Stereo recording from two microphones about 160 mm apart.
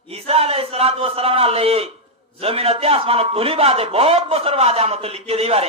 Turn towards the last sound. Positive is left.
turn(degrees=-40)  # may be behind; listen again after turning